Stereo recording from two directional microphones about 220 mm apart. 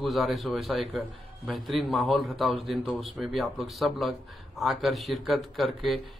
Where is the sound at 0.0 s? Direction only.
Centre (ahead or behind).